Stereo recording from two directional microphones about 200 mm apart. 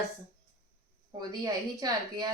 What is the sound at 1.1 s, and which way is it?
A woman's voice, 20° right (ahead or behind).